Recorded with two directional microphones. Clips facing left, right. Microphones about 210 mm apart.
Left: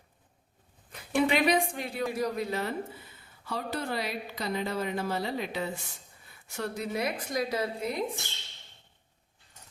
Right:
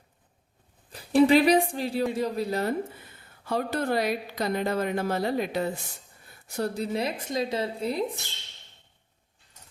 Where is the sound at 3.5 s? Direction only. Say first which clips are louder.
Right 6 dB; 50° right (ahead or behind); by 8.0 s 30° right (ahead or behind).